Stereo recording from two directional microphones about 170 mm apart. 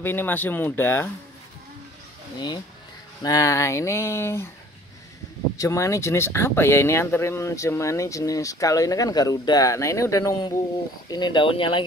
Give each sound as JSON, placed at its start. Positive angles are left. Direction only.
{"t": 0.0, "sound": "speech", "side_deg": 10}
{"t": 3.2, "sound": "speech", "side_deg": 20}
{"t": 5.6, "sound": "speech", "side_deg": 20}